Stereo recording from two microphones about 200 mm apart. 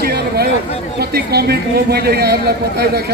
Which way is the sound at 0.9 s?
50° right (ahead or behind).